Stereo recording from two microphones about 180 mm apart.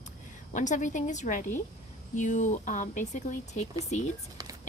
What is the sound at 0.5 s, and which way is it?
Speech, 45° left (ahead or behind).